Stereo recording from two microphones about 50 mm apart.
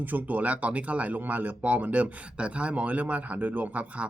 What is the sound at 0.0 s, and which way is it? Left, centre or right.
Speech, right.